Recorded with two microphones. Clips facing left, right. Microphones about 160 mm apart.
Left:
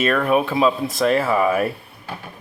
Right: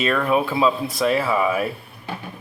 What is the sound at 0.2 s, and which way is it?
Speech, 15° left (ahead or behind).